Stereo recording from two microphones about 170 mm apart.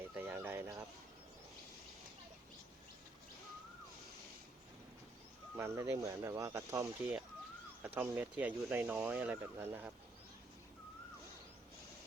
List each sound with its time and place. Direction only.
0.2 s a sound: 10° right (ahead or behind)
5.5 s speech: 15° right (ahead or behind)
7.0 s speech: 5° right (ahead or behind)